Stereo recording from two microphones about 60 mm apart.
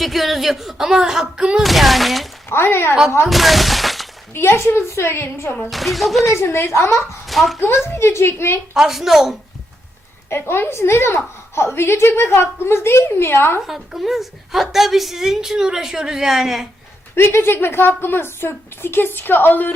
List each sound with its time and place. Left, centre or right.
0.0 s speech: centre
1.6 s a woman's voice: centre
2.5 s a woman's voice: left
3.2 s shatter: centre
4.4 s a woman's voice: left
5.7 s a woman's voice: centre
6.2 s a woman's voice: left
7.3 s speech: centre
7.9 s a woman's voice: left
8.7 s a woman's voice: centre
10.2 s a woman's voice: left
13.7 s a woman's voice: centre
17.2 s a woman's voice: left